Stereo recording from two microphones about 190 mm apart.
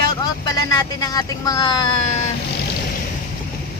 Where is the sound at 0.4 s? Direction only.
20° left (ahead or behind).